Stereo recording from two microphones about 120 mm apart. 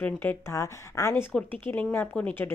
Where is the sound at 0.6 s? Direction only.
25° left (ahead or behind).